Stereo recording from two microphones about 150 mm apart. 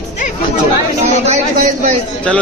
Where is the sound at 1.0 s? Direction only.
50° right (ahead or behind).